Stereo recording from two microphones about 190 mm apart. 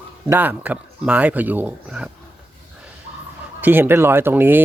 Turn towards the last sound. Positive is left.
turn(degrees=-10)  # may be behind; listen again after turning